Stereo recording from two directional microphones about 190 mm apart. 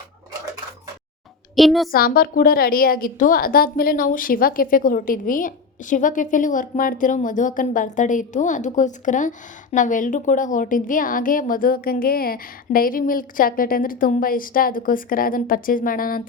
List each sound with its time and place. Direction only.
1.5 s a child's voice: centre (ahead or behind)
1.9 s a woman's voice: 50° left (ahead or behind)